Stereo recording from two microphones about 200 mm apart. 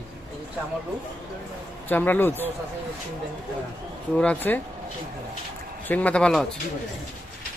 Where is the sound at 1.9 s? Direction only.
10° left (ahead or behind).